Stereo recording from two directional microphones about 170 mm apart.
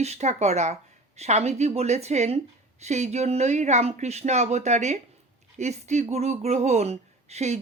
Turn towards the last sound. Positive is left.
turn(degrees=-40)  # may be behind; listen again after turning